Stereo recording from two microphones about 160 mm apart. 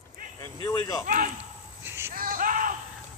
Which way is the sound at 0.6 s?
20° left (ahead or behind).